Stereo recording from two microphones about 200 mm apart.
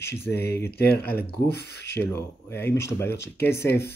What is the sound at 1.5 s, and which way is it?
Speech, 55° left (ahead or behind).